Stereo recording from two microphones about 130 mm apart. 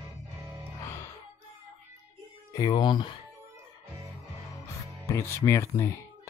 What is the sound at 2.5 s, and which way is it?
Speech, 35° left (ahead or behind).